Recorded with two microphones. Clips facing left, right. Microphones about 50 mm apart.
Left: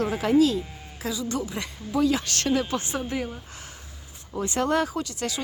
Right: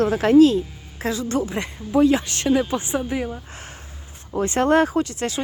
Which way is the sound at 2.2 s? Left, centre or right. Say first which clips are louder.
Right 5 dB; centre.